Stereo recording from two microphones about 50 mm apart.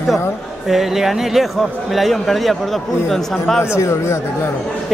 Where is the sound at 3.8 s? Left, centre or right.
Left.